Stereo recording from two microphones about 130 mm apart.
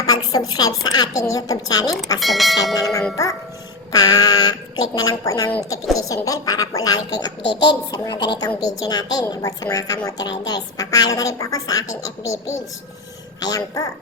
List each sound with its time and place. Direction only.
0.0 s a woman's voice: 30° left (ahead or behind)
2.1 s speech: centre (ahead or behind)
2.7 s a woman's voice: 25° left (ahead or behind)